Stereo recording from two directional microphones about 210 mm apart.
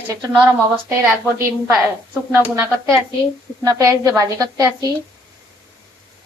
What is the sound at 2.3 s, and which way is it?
A woman's voice, 15° right (ahead or behind).